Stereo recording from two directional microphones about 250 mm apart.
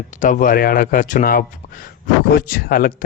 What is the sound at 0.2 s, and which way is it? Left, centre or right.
Speech, left.